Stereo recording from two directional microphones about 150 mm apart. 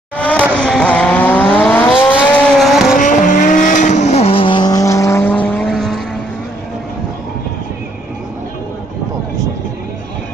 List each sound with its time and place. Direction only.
0.2 s vehicle: 10° left (ahead or behind)
2.3 s vehicle: centre (ahead or behind)
3.0 s vehicle: 60° left (ahead or behind); by 6.0 s centre (ahead or behind)